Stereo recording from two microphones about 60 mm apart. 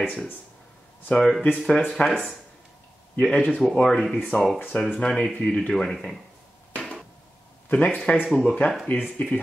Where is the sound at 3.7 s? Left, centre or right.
Centre.